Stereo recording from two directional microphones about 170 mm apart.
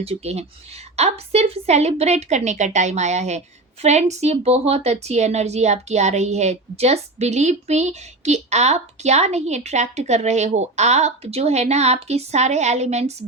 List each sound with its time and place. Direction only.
0.0 s a woman's voice: 35° right (ahead or behind)